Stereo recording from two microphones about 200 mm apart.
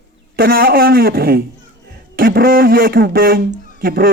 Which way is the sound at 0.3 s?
45° right (ahead or behind).